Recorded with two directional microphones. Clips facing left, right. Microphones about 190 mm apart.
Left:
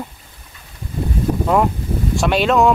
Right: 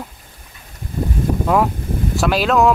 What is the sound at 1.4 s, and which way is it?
Speech, centre (ahead or behind).